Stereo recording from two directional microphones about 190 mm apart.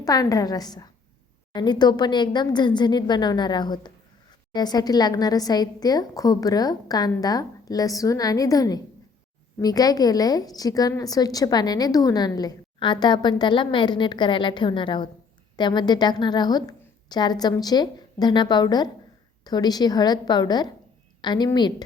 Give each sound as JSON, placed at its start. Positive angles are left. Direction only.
{"t": 0.0, "sound": "a woman's voice", "side_deg": 20}